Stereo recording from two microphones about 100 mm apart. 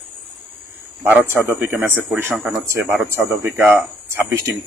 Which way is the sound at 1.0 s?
20° right (ahead or behind).